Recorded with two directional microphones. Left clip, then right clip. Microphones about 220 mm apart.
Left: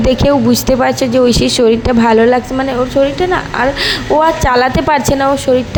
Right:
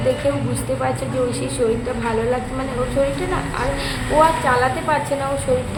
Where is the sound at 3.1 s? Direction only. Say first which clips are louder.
Left 10 dB; 35° left (ahead or behind).